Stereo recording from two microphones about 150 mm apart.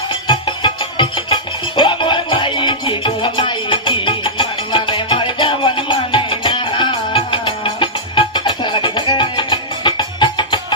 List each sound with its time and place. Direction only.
0.3 s music: 30° left (ahead or behind)